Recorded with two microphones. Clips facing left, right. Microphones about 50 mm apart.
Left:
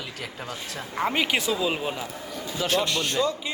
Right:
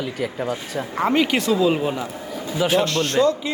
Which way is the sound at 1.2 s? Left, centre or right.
Centre.